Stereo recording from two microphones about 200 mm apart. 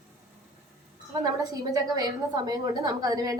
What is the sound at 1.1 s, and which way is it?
A woman's voice, 20° right (ahead or behind).